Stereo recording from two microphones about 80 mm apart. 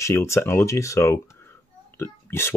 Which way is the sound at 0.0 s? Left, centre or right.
Left.